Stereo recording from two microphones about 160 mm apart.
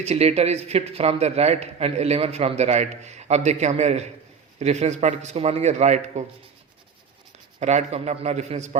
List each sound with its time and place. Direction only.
0.0 s speech: 40° right (ahead or behind)
7.6 s speech: 45° right (ahead or behind)